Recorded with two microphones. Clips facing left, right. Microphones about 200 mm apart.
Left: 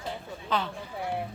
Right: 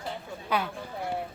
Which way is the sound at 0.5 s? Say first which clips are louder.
Right 1 dB; 10° right (ahead or behind).